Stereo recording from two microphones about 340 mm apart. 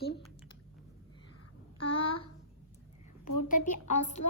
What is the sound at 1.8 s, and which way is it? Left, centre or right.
Child singing, left.